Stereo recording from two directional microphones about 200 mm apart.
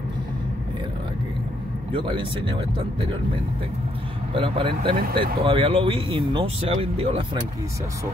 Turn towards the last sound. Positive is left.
turn(degrees=-25)  # may be behind; listen again after turning